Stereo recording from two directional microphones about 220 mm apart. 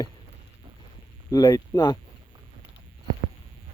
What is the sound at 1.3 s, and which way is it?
Speech, 15° left (ahead or behind).